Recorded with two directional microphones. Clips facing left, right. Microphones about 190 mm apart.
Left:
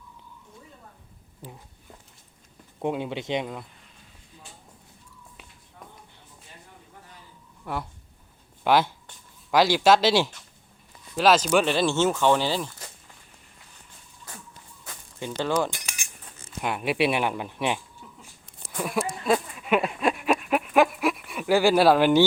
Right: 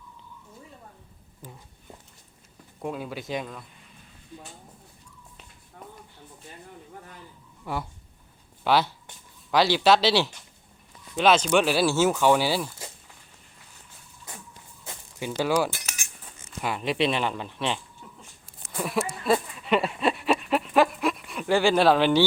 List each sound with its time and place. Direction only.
2.8 s speech: 25° left (ahead or behind)
7.6 s speech: centre (ahead or behind)
8.6 s speech: 15° left (ahead or behind); by 12.7 s 10° right (ahead or behind)
15.2 s cutlery: 10° right (ahead or behind)
16.5 s speech: 5° left (ahead or behind)
18.7 s a sound: centre (ahead or behind)
19.2 s dog: centre (ahead or behind)